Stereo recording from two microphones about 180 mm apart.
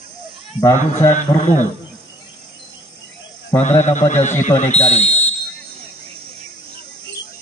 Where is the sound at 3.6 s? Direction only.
40° left (ahead or behind).